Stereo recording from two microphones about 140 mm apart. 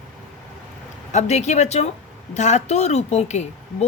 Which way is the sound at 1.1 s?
55° left (ahead or behind).